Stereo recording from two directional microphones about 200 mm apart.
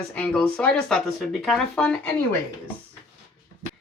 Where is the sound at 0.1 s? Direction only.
5° left (ahead or behind).